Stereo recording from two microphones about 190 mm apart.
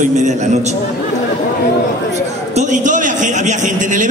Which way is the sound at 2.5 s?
40° right (ahead or behind).